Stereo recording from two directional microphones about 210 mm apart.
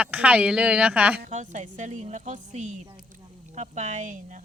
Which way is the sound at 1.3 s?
35° right (ahead or behind).